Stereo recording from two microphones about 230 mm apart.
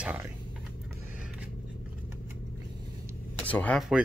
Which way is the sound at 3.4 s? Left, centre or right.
Centre.